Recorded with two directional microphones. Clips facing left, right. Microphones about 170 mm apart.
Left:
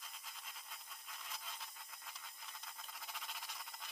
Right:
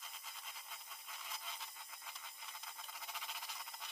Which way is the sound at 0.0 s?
Centre (ahead or behind).